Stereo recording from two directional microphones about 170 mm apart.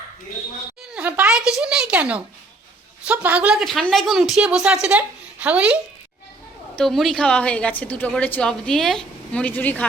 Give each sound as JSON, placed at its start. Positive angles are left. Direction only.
{"t": 0.9, "sound": "a woman's voice", "side_deg": -10}